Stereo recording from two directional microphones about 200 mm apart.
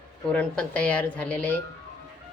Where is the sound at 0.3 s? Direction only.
5° left (ahead or behind).